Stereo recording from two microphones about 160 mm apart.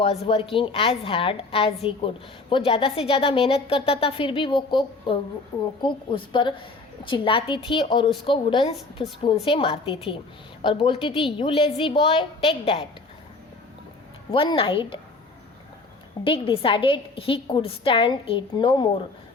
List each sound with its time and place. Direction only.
0.0 s speech: 35° left (ahead or behind)
14.3 s speech: 35° left (ahead or behind)
16.2 s speech: 35° left (ahead or behind)